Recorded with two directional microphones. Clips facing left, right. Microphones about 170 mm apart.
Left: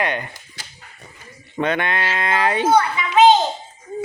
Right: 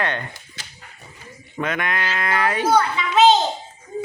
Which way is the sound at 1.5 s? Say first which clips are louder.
Left 3 dB; 30° left (ahead or behind).